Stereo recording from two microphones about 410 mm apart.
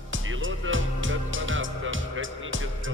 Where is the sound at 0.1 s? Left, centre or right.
Right.